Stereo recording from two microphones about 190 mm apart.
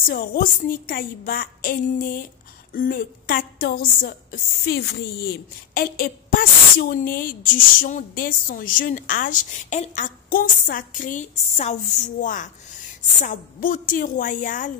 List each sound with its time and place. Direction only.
0.1 s a woman's voice: 50° left (ahead or behind)